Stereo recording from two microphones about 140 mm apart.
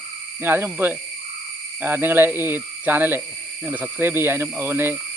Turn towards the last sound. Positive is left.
turn(degrees=-15)  # may be behind; listen again after turning